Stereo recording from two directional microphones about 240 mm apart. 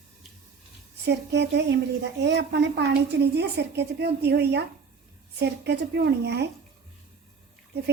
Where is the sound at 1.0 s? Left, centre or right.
Right.